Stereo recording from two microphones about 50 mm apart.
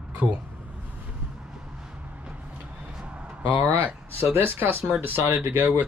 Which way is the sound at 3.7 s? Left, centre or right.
Right.